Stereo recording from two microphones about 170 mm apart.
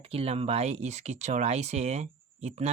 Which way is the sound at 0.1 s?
35° right (ahead or behind).